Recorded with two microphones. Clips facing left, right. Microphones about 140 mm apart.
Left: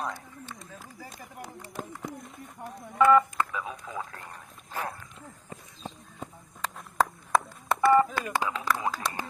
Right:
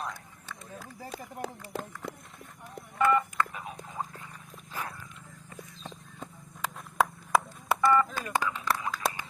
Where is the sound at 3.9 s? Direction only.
80° left.